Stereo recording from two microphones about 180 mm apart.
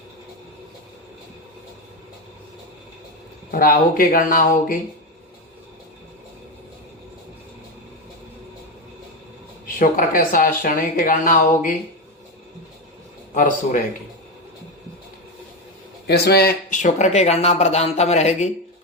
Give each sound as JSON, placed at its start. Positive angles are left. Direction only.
{"t": 3.5, "sound": "speech", "side_deg": 50}
{"t": 9.6, "sound": "speech", "side_deg": 50}
{"t": 13.3, "sound": "speech", "side_deg": 45}
{"t": 16.0, "sound": "speech", "side_deg": 60}